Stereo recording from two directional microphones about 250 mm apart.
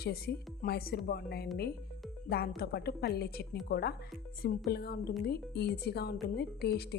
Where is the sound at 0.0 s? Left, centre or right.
Left.